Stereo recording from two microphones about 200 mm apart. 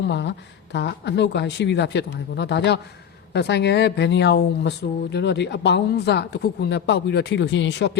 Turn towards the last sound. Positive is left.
turn(degrees=60)  # may be behind; listen again after turning